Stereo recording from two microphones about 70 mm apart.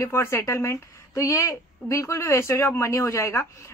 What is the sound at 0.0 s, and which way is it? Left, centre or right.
A woman's voice, left.